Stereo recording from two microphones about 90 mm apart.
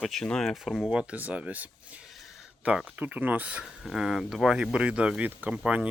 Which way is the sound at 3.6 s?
5° right (ahead or behind).